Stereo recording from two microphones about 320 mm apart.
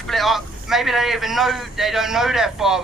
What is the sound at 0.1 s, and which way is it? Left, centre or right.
A man's voice, centre.